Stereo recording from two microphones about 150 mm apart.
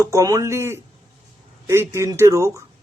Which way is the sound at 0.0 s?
20° right (ahead or behind).